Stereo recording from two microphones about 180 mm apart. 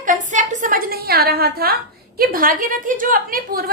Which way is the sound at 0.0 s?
45° right (ahead or behind).